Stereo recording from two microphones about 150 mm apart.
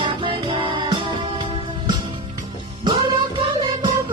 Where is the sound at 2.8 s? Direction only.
35° right (ahead or behind).